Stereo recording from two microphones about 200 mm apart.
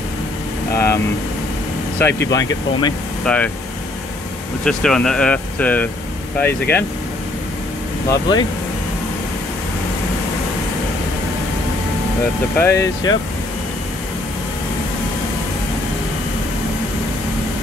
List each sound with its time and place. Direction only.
0.7 s speech: 15° left (ahead or behind)
3.3 s speech: 5° left (ahead or behind)
4.6 s speech: 5° left (ahead or behind)
8.1 s speech: 20° left (ahead or behind)
12.5 s speech: 15° left (ahead or behind)